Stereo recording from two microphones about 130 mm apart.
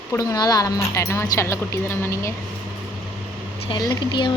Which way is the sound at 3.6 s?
35° left (ahead or behind).